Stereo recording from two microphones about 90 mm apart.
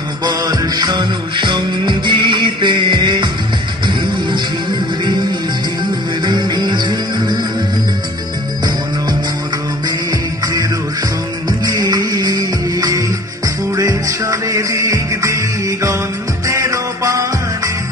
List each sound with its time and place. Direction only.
0.2 s music: 50° right (ahead or behind)
6.2 s music: 55° right (ahead or behind)
11.6 s music: 50° right (ahead or behind)